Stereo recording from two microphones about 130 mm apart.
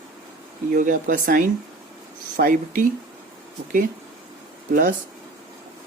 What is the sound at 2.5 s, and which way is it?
Speech, 90° right.